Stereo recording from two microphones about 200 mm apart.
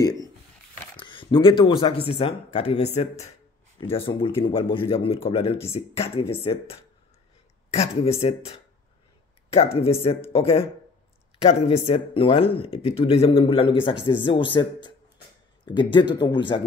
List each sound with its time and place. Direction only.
0.9 s speech: 25° left (ahead or behind)
6.3 s speech: 15° left (ahead or behind)
7.7 s speech: 30° left (ahead or behind)